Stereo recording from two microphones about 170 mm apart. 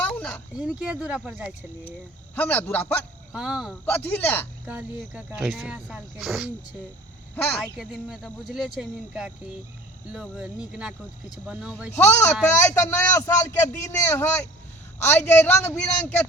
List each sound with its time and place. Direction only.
0.0 s a sound: 5° left (ahead or behind)
0.5 s speech: 5° right (ahead or behind)
2.3 s speech: 10° left (ahead or behind)
3.3 s speech: 5° right (ahead or behind)
3.8 s speech: 10° left (ahead or behind)
4.6 s speech: 5° right (ahead or behind)
7.3 s speech: 10° left (ahead or behind)
7.8 s speech: 5° right (ahead or behind)
11.9 s speech: 15° left (ahead or behind)